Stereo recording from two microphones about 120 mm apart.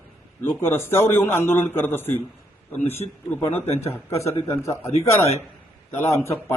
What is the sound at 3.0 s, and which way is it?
Speech, 45° left (ahead or behind).